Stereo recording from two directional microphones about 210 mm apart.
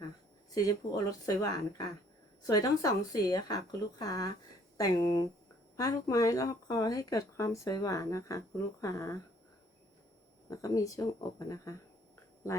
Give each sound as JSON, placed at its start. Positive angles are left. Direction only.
{"t": 0.5, "sound": "speech", "side_deg": 15}
{"t": 10.5, "sound": "speech", "side_deg": 15}